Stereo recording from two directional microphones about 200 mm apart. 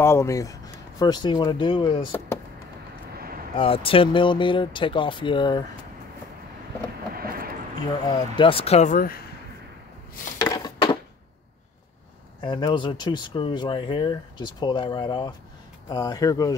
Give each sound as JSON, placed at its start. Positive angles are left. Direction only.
{"t": 0.0, "sound": "speech", "side_deg": 15}
{"t": 3.5, "sound": "speech", "side_deg": 25}
{"t": 7.2, "sound": "a sound", "side_deg": -45}
{"t": 8.1, "sound": "speech", "side_deg": 25}
{"t": 10.4, "sound": "a sound", "side_deg": 20}
{"t": 12.4, "sound": "speech", "side_deg": 25}